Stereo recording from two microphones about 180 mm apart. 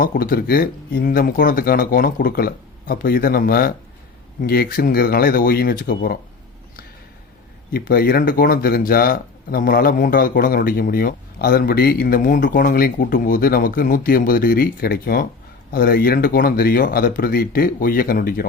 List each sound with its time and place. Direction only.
0.0 s speech: 55° left (ahead or behind)
7.7 s speech: 60° left (ahead or behind)